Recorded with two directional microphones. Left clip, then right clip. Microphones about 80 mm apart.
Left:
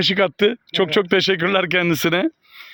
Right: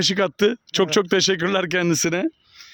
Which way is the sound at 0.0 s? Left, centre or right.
Right.